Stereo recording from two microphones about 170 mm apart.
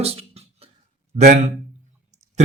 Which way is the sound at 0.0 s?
35° right (ahead or behind).